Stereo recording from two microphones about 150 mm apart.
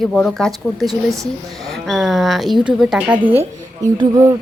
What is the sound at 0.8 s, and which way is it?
Speech, 20° right (ahead or behind).